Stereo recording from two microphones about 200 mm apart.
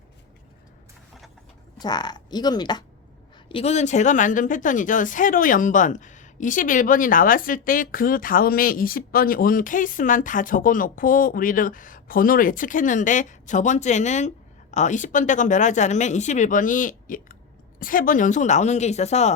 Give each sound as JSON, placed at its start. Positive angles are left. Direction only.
{"t": 1.8, "sound": "speech", "side_deg": 20}
{"t": 3.5, "sound": "speech", "side_deg": 30}